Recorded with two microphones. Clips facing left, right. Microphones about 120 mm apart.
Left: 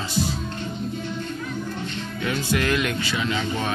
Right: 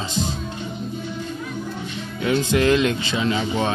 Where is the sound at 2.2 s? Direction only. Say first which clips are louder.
Right 6 dB; 25° right (ahead or behind).